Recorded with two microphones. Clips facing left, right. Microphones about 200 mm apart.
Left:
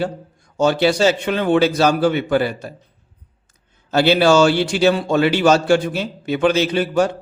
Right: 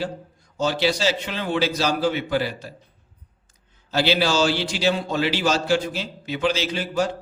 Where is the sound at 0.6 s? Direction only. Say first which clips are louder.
Left 7 dB; 55° left (ahead or behind).